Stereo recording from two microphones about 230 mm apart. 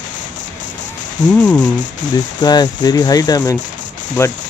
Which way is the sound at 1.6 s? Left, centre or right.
Centre.